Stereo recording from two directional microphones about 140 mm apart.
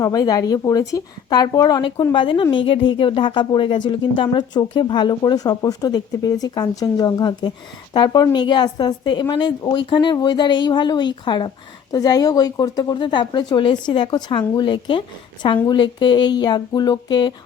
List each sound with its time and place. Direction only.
0.0 s speech: 25° left (ahead or behind)